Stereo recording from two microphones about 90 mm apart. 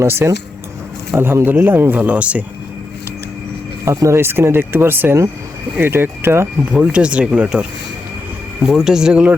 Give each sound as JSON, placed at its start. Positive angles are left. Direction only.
{"t": 0.0, "sound": "speech", "side_deg": -30}
{"t": 3.8, "sound": "speech", "side_deg": -30}
{"t": 6.7, "sound": "speech", "side_deg": -10}